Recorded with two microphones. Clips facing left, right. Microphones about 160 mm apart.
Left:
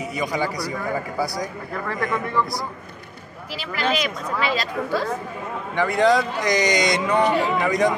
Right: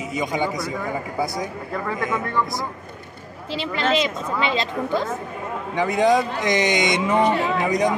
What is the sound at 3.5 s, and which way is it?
A man's voice, 25° right (ahead or behind).